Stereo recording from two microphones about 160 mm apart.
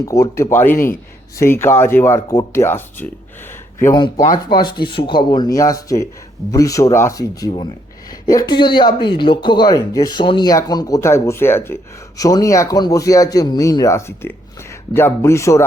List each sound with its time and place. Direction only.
0.0 s speech: 20° left (ahead or behind)
4.4 s speech: 30° left (ahead or behind)